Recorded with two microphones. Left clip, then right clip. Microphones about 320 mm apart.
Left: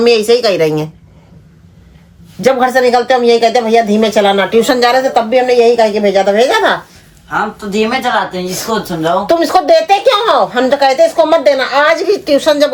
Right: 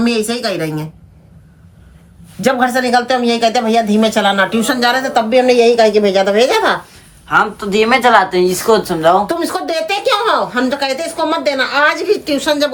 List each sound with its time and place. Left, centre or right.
0.0 s speech: centre
2.4 s speech: centre
7.3 s speech: right
9.2 s speech: centre